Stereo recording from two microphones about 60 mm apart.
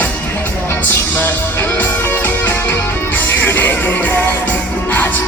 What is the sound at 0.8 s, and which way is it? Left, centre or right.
Music, left.